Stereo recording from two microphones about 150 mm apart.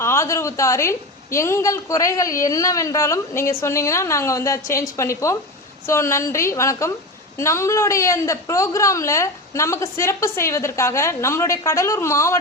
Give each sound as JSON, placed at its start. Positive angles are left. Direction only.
{"t": 0.0, "sound": "a woman's voice", "side_deg": 20}